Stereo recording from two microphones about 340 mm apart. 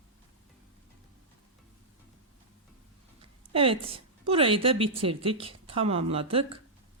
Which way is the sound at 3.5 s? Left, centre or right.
Centre.